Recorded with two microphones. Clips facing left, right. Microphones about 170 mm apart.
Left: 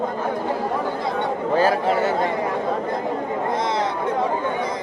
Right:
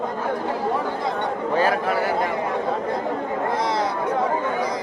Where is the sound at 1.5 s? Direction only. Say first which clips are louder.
Left 2 dB; 30° left (ahead or behind).